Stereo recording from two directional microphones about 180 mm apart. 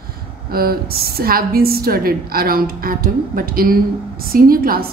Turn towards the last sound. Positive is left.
turn(degrees=-55)  # may be behind; listen again after turning